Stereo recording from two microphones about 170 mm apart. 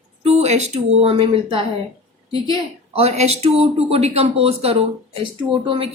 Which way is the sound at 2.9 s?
35° right (ahead or behind).